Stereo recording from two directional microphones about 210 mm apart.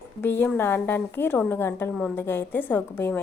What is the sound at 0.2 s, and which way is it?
A woman's voice, 10° left (ahead or behind).